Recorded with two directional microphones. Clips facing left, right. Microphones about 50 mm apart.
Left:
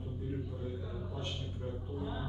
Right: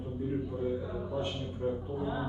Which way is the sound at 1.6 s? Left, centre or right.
Right.